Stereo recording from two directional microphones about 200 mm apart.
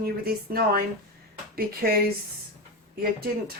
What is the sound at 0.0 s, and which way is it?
Speech, 50° right (ahead or behind).